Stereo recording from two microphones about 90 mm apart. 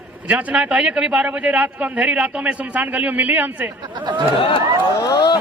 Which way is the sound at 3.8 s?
60° right (ahead or behind).